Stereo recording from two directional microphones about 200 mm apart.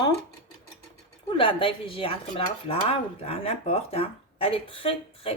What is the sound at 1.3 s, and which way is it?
Dishes, 25° left (ahead or behind).